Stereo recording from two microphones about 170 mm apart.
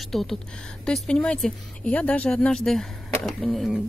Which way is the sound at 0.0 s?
Centre (ahead or behind).